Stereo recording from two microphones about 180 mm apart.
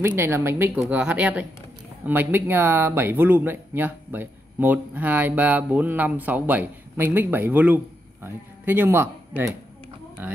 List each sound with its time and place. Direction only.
0.0 s speech: 10° right (ahead or behind)